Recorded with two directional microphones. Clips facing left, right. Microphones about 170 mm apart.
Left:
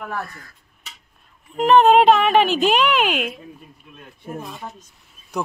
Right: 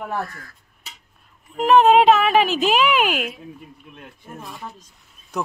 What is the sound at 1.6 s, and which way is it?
Speech, 5° right (ahead or behind).